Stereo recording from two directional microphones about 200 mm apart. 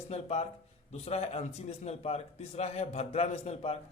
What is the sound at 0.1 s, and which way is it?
A man's voice, 30° left (ahead or behind).